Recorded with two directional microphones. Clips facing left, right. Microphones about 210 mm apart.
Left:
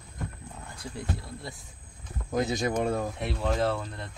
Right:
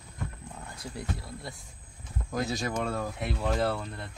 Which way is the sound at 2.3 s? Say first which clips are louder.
Left 4 dB; 20° left (ahead or behind).